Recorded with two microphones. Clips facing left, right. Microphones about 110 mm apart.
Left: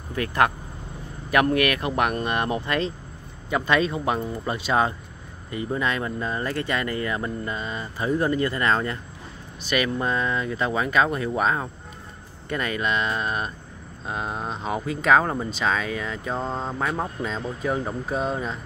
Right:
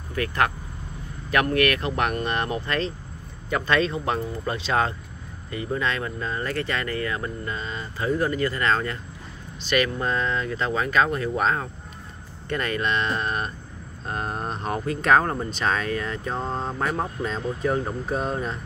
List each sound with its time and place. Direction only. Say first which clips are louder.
0.1 s speech: left 2 dB; 20° left (ahead or behind); by 18.6 s centre (ahead or behind)